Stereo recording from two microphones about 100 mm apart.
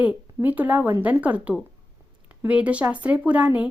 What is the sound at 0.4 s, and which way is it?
Speech, 15° right (ahead or behind).